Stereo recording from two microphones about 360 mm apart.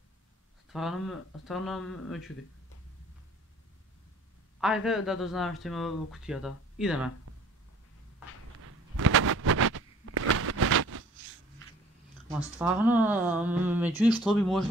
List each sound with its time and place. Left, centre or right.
0.7 s speech: centre
4.6 s speech: centre
8.6 s a sound: right
12.5 s speech: centre
13.9 s speech: centre